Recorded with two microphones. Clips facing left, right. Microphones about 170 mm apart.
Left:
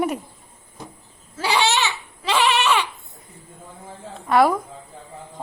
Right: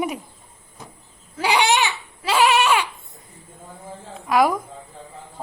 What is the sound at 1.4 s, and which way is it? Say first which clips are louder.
Goat: right 2 dB; 15° right (ahead or behind).